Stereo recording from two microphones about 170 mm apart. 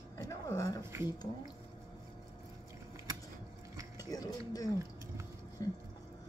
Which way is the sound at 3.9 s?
20° left (ahead or behind).